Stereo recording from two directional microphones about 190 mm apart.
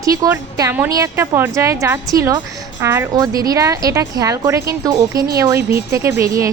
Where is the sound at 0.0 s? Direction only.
15° right (ahead or behind).